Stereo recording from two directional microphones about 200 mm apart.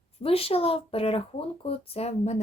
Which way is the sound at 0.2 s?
30° left (ahead or behind).